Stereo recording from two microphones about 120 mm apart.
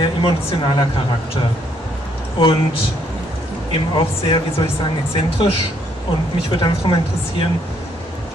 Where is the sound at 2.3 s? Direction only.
45° left (ahead or behind).